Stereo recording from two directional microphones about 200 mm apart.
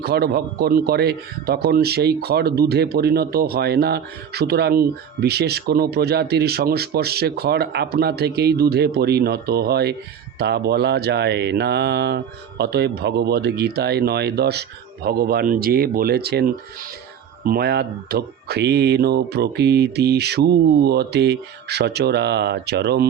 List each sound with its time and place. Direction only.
0.0 s speech: 55° right (ahead or behind)